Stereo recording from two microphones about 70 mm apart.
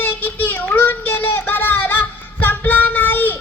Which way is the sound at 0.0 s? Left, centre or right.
Left.